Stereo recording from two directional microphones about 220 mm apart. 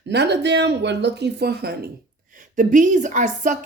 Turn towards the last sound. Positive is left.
turn(degrees=-35)  # may be behind; listen again after turning